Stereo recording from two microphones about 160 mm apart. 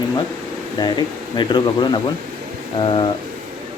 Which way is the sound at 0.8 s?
30° left (ahead or behind).